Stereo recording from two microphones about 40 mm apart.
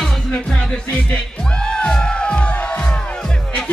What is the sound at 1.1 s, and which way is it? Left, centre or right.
Music, left.